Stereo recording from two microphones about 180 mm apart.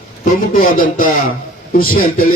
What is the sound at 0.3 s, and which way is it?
Speech, 50° left (ahead or behind).